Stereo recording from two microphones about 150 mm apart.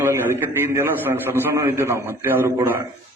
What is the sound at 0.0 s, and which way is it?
A man's voice, 15° right (ahead or behind).